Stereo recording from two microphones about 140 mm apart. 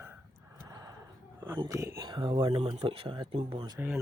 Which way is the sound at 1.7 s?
20° right (ahead or behind).